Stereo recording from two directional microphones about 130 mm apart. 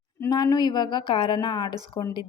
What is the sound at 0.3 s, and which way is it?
A woman's voice, 30° left (ahead or behind).